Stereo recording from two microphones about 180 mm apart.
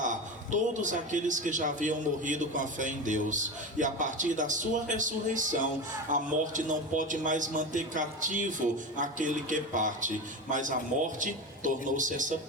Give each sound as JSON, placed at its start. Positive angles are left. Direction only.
{"t": 0.0, "sound": "a man's voice", "side_deg": -45}